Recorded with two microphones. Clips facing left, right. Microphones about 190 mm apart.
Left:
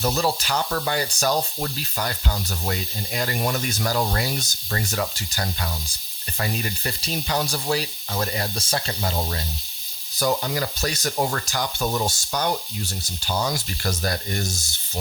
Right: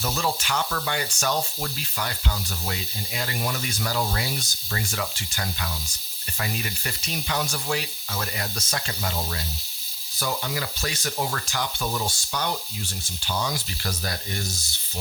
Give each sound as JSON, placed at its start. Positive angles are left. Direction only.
{"t": 0.0, "sound": "speech", "side_deg": 35}